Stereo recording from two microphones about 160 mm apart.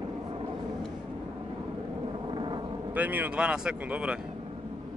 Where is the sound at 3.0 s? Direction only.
10° right (ahead or behind).